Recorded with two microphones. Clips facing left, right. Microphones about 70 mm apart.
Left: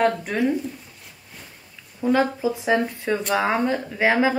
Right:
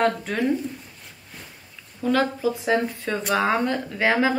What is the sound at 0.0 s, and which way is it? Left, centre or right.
Speech, centre.